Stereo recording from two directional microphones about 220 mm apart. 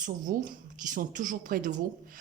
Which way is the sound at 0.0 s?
35° right (ahead or behind).